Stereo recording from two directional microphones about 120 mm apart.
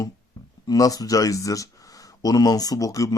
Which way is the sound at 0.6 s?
30° left (ahead or behind).